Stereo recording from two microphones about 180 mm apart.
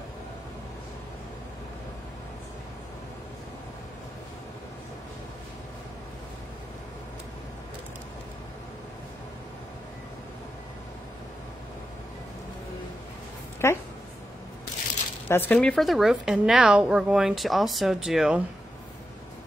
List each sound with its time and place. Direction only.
13.6 s speech: 15° left (ahead or behind)
15.2 s speech: 10° left (ahead or behind)